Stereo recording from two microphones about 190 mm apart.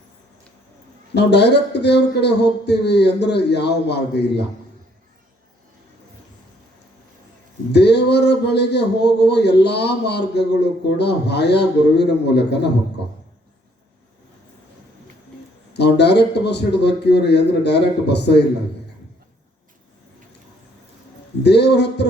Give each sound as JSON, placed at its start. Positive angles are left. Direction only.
{"t": 1.1, "sound": "a man's voice", "side_deg": 60}
{"t": 7.7, "sound": "a man's voice", "side_deg": 60}
{"t": 15.7, "sound": "a man's voice", "side_deg": 60}
{"t": 21.4, "sound": "a man's voice", "side_deg": 60}